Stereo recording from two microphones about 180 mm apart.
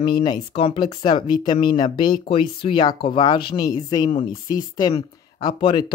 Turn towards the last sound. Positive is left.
turn(degrees=30)  # may be behind; listen again after turning